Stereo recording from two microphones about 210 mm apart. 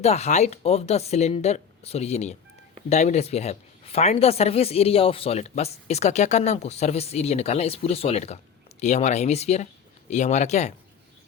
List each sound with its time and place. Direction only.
0.0 s speech: 30° left (ahead or behind)